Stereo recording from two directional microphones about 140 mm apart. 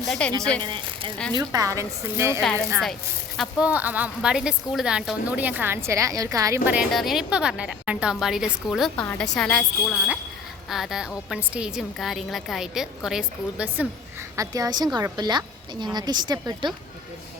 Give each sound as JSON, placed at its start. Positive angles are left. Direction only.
{"t": 0.0, "sound": "a woman's voice", "side_deg": 5}
{"t": 0.6, "sound": "a woman's voice", "side_deg": -35}
{"t": 1.3, "sound": "a woman's voice", "side_deg": -25}
{"t": 3.6, "sound": "a woman's voice", "side_deg": -10}
{"t": 6.9, "sound": "a woman's voice", "side_deg": 0}
{"t": 9.0, "sound": "a woman's voice", "side_deg": 5}
{"t": 14.3, "sound": "a woman's voice", "side_deg": -25}